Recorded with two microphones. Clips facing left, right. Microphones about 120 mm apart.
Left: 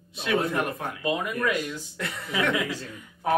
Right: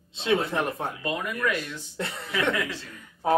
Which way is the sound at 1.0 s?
15° left (ahead or behind).